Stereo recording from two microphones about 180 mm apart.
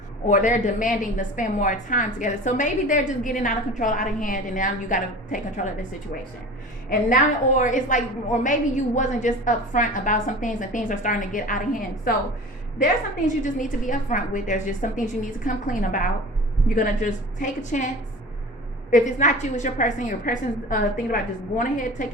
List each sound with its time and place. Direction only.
0.3 s a woman's voice: 45° left (ahead or behind)
7.1 s a woman's voice: 45° left (ahead or behind)